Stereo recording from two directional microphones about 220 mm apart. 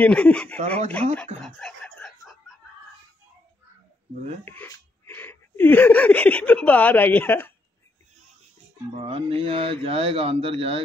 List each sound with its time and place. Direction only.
0.0 s speech: 5° left (ahead or behind)
1.1 s a sound: 5° left (ahead or behind)
4.5 s speech: 10° left (ahead or behind)
9.0 s speech: 25° right (ahead or behind)